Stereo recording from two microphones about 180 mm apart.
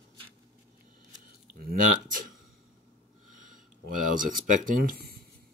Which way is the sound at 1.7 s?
50° right (ahead or behind).